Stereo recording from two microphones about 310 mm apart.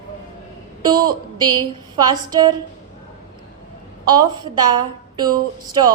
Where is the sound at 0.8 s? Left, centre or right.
Centre.